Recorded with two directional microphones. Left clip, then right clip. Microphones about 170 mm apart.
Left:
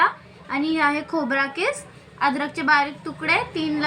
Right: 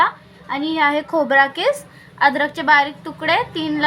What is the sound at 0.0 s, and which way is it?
A woman's voice, 50° right (ahead or behind).